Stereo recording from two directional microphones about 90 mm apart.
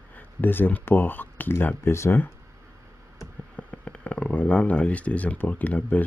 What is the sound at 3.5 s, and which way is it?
Speech, 15° left (ahead or behind).